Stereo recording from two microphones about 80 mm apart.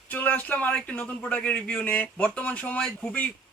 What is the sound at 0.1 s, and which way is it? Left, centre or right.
Speech, left.